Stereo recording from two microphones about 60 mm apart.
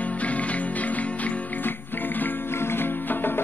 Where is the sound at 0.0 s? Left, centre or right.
Left.